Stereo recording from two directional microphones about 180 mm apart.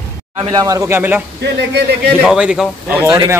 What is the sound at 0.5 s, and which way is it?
Speech, 20° right (ahead or behind).